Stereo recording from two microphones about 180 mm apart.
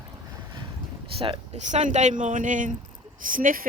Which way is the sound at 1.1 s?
30° right (ahead or behind).